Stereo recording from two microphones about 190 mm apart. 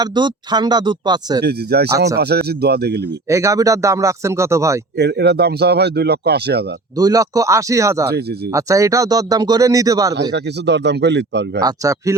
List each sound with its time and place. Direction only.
0.0 s speech: 25° right (ahead or behind)
1.5 s speech: 60° right (ahead or behind)
3.2 s speech: 15° right (ahead or behind)
4.9 s speech: 60° right (ahead or behind)
6.9 s speech: 20° right (ahead or behind)
10.3 s speech: 65° right (ahead or behind)
11.6 s speech: 15° right (ahead or behind)